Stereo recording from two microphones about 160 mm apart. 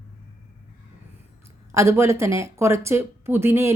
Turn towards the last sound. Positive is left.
turn(degrees=-15)  # may be behind; listen again after turning